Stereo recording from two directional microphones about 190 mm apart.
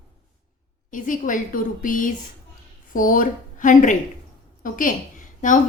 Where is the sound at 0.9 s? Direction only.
45° left (ahead or behind).